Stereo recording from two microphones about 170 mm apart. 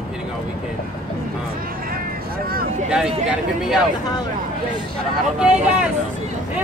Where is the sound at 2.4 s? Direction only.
60° right (ahead or behind).